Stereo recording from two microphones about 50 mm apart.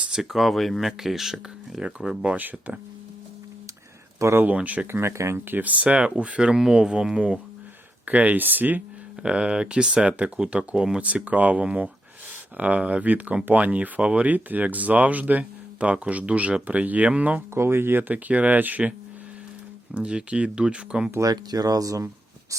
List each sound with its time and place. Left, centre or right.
0.2 s speech: centre
2.2 s speech: right
4.2 s speech: right
4.5 s speech: right
4.9 s speech: right
5.1 s speech: right
5.5 s speech: right; by 7.2 s centre
8.0 s speech: right
9.2 s speech: centre
17.5 s speech: right
18.1 s speech: right
19.9 s speech: centre
21.8 s speech: right